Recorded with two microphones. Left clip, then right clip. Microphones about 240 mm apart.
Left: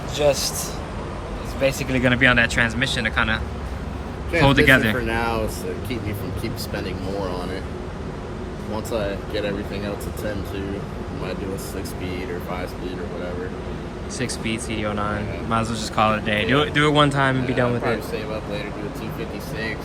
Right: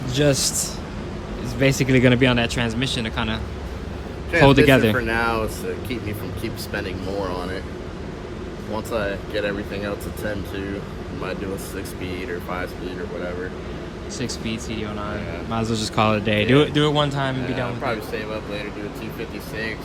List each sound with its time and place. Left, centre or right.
1.6 s speech: right
8.7 s speech: centre
14.2 s speech: centre
15.5 s a man's voice: centre
16.7 s speech: centre